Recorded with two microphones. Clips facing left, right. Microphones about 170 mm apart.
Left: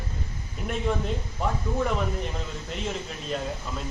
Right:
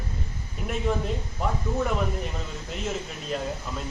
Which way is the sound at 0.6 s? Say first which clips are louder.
Even; centre (ahead or behind).